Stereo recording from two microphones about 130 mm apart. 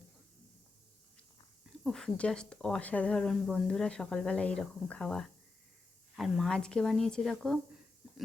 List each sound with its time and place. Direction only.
1.8 s speech: 5° left (ahead or behind)